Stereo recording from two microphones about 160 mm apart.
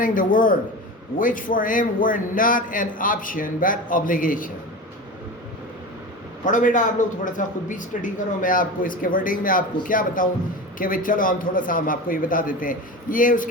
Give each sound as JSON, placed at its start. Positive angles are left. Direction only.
{"t": 0.0, "sound": "a man's voice", "side_deg": 55}
{"t": 6.4, "sound": "a man's voice", "side_deg": 55}